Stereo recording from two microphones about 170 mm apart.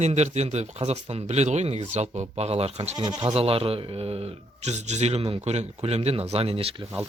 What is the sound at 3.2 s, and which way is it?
A man's voice, 35° right (ahead or behind).